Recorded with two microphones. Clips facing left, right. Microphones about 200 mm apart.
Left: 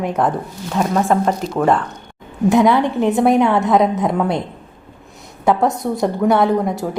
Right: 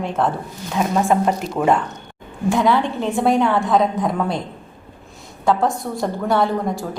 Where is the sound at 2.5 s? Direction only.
20° left (ahead or behind).